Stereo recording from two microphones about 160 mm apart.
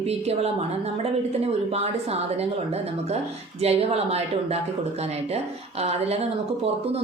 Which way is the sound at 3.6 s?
40° right (ahead or behind).